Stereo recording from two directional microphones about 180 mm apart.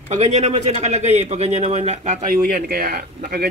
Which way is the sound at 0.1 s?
40° right (ahead or behind).